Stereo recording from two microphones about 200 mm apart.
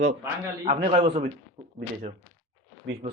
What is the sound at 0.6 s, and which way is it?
Speech, 45° right (ahead or behind).